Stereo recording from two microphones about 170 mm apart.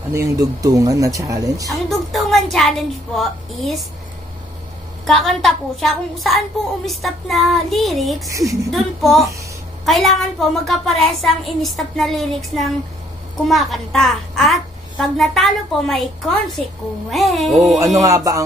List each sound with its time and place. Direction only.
0.1 s speech: 20° right (ahead or behind)
1.7 s a sound: centre (ahead or behind)
3.2 s a child's voice: centre (ahead or behind)
5.0 s a child's voice: centre (ahead or behind)
8.3 s speech: 20° right (ahead or behind)
8.6 s a child's voice: centre (ahead or behind)
18.0 s speech: 20° right (ahead or behind)